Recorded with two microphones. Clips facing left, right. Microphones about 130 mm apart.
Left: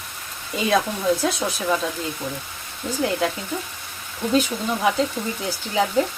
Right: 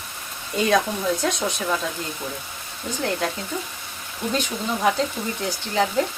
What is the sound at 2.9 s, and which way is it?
Speech, 5° left (ahead or behind).